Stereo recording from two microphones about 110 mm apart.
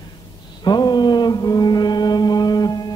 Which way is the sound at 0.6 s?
40° left (ahead or behind).